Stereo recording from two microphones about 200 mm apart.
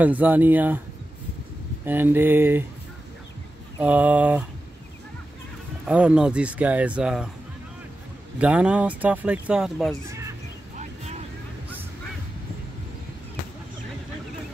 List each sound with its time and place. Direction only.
0.0 s speech: 10° right (ahead or behind)
1.9 s speech: 10° right (ahead or behind)
3.8 s speech: 5° right (ahead or behind)
5.9 s speech: 5° right (ahead or behind)
8.4 s speech: 5° right (ahead or behind)
10.8 s vehicle: 35° right (ahead or behind)